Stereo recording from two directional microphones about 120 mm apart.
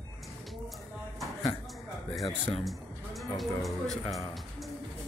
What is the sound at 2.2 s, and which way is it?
Speech, 55° left (ahead or behind).